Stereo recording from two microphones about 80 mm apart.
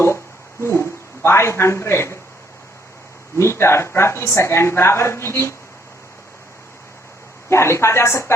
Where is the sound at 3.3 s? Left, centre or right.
Left.